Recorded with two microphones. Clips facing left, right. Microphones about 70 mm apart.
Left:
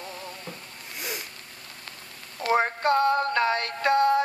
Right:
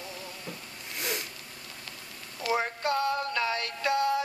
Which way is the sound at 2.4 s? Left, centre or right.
Left.